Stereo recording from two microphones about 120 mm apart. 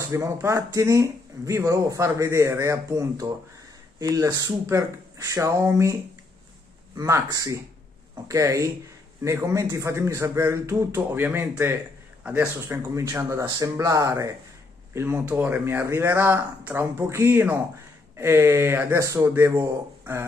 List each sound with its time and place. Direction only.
0.0 s a man's voice: 25° right (ahead or behind)
7.0 s a man's voice: 25° right (ahead or behind)